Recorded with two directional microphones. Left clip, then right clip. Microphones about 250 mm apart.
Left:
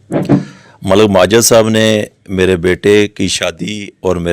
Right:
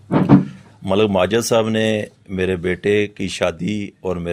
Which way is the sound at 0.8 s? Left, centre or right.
Left.